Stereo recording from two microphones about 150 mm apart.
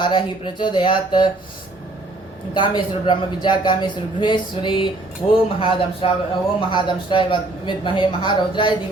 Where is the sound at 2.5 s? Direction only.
30° left (ahead or behind).